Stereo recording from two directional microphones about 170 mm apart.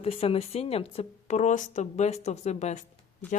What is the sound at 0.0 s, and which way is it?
Speech, 35° left (ahead or behind).